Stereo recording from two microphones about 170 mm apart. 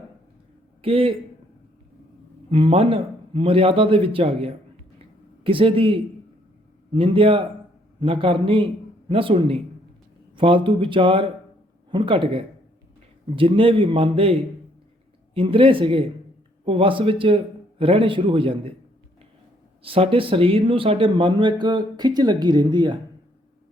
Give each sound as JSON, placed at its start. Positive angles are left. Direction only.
{"t": 0.8, "sound": "a man's voice", "side_deg": -35}
{"t": 2.5, "sound": "a man's voice", "side_deg": -30}
{"t": 4.9, "sound": "a sound", "side_deg": -30}
{"t": 6.9, "sound": "a man's voice", "side_deg": -30}
{"t": 15.4, "sound": "a man's voice", "side_deg": -30}
{"t": 19.8, "sound": "speech", "side_deg": -30}